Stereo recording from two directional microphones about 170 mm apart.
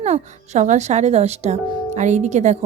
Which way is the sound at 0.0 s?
40° right (ahead or behind).